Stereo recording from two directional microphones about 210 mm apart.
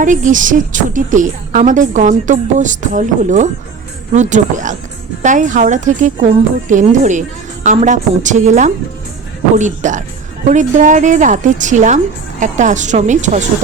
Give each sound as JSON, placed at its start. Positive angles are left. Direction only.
{"t": 0.0, "sound": "a woman's voice", "side_deg": -35}